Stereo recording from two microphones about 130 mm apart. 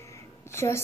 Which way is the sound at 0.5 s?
20° left (ahead or behind).